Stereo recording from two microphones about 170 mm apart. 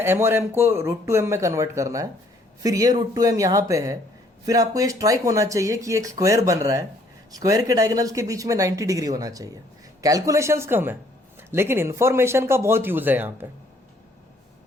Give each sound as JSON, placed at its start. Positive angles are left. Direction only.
{"t": 0.0, "sound": "speech", "side_deg": -15}